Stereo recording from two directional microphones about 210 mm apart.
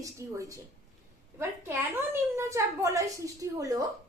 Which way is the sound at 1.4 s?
10° right (ahead or behind).